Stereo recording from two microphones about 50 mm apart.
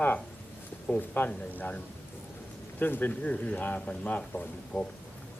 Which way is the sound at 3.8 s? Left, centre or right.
Left.